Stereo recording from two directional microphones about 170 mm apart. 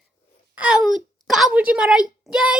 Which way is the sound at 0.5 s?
5° right (ahead or behind).